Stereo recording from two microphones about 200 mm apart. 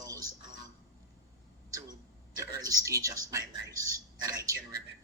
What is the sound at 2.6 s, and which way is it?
A man's voice, 15° right (ahead or behind).